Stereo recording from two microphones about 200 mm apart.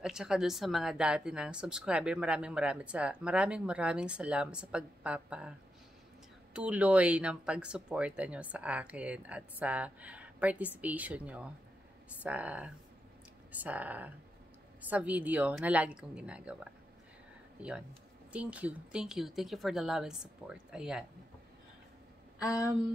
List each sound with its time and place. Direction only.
0.0 s a woman's voice: 5° right (ahead or behind)
6.5 s a woman's voice: 5° right (ahead or behind)
22.4 s speech: 15° left (ahead or behind)